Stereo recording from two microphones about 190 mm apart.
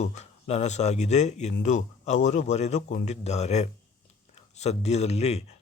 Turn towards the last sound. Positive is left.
turn(degrees=35)  # may be behind; listen again after turning